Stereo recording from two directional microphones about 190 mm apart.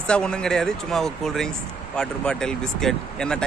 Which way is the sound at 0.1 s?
5° left (ahead or behind).